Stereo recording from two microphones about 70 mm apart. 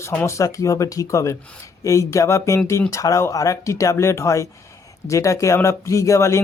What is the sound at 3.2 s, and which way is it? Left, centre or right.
Speech, left.